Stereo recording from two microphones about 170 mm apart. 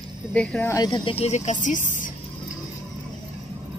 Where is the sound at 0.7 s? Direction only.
25° left (ahead or behind); by 2.1 s 50° left (ahead or behind).